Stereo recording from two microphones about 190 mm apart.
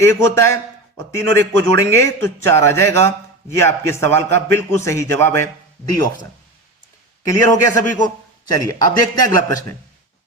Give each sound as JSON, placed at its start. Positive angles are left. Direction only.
{"t": 0.0, "sound": "a man's voice", "side_deg": 15}
{"t": 7.3, "sound": "a man's voice", "side_deg": 15}